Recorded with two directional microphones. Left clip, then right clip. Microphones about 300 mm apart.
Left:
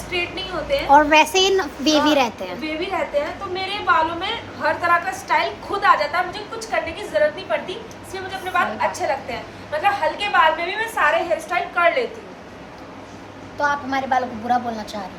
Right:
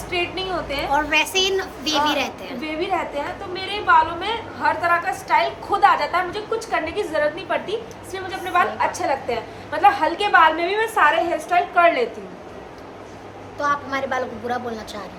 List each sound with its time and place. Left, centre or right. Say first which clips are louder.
0.1 s a woman's voice: right 1 dB; centre
0.9 s a child's voice: left 7 dB; centre
3.5 s a woman's voice: right 3 dB; centre
13.6 s a woman's voice: left 1 dB; centre